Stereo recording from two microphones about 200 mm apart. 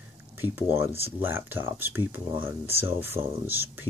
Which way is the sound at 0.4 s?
10° right (ahead or behind).